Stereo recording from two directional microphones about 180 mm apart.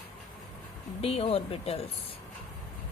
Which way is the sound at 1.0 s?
35° left (ahead or behind).